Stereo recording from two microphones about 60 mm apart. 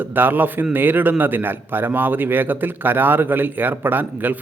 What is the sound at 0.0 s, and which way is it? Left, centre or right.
A man's voice, right.